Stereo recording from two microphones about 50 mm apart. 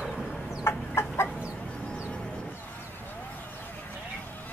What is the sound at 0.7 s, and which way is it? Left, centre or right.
Chicken, left.